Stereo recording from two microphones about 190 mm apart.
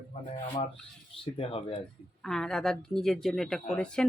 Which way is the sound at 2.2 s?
5° left (ahead or behind).